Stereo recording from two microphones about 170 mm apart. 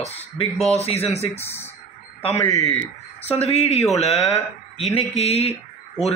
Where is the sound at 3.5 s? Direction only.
40° left (ahead or behind).